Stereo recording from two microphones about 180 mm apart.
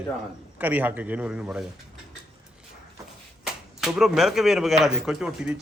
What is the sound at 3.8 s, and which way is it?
Speech, 5° right (ahead or behind).